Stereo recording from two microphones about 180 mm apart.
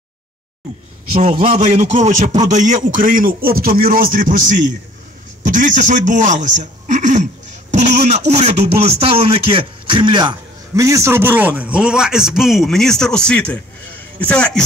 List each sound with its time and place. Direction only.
1.1 s a man's voice: 35° right (ahead or behind); by 14.6 s 5° left (ahead or behind)